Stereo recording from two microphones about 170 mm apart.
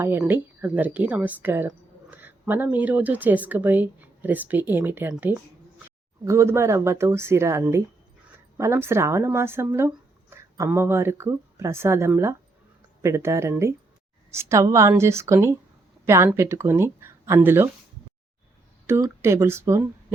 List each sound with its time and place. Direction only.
0.0 s speech: 10° right (ahead or behind)
18.9 s speech: 15° right (ahead or behind)